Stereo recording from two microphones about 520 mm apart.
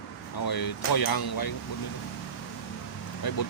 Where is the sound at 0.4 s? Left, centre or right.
Left.